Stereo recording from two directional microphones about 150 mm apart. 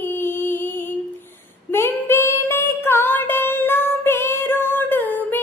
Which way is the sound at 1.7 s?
15° left (ahead or behind).